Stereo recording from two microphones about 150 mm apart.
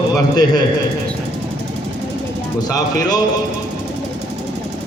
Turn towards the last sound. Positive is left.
turn(degrees=25)  # may be behind; listen again after turning